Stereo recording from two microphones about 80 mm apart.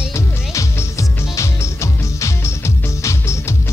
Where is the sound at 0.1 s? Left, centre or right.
Left.